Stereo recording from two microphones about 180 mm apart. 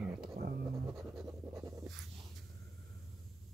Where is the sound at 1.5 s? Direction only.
15° right (ahead or behind).